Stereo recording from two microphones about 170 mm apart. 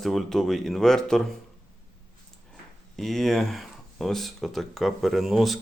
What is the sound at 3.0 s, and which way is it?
Speech, centre (ahead or behind).